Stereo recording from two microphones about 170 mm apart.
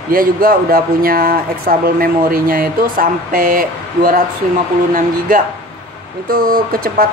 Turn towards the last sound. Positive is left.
turn(degrees=-60)  # may be behind; listen again after turning